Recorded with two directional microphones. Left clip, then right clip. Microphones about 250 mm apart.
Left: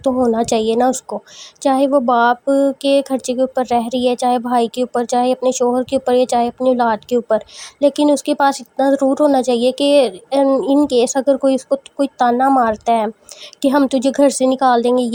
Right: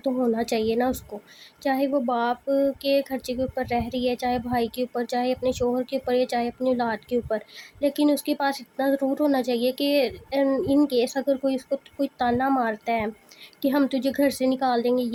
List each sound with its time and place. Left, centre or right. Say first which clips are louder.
0.3 s speech: left 9 dB; left